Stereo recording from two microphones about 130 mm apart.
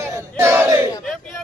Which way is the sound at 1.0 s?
Centre (ahead or behind).